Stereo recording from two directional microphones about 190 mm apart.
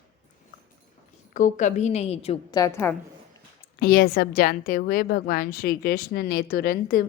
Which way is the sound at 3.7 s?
50° left (ahead or behind).